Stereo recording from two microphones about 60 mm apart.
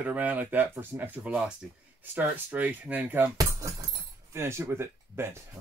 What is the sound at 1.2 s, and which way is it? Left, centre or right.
Speech, centre.